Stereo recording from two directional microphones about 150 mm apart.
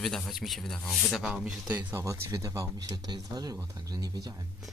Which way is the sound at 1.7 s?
20° right (ahead or behind).